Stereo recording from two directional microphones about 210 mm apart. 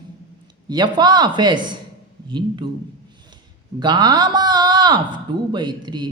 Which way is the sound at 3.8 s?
20° right (ahead or behind).